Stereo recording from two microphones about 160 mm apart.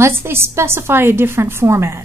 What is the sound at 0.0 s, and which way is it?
A woman's voice, 15° right (ahead or behind).